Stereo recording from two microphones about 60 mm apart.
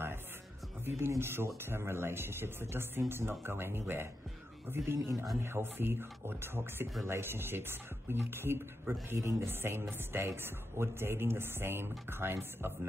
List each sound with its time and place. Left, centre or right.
0.8 s speech: right
4.9 s a man's voice: right
5.4 s speech: right